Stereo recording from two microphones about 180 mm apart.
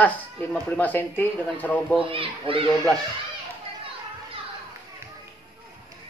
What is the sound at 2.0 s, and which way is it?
Speech, 30° right (ahead or behind).